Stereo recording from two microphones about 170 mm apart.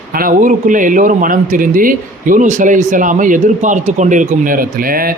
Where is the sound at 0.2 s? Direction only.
50° right (ahead or behind).